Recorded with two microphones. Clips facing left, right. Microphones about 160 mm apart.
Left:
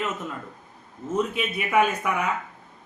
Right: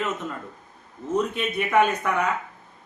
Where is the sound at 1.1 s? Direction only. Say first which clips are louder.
Right 1 dB; 5° left (ahead or behind).